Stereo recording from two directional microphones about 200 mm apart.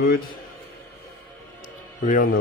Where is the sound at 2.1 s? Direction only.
45° left (ahead or behind).